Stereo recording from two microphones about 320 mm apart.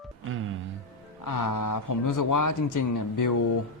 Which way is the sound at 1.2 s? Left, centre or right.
Left.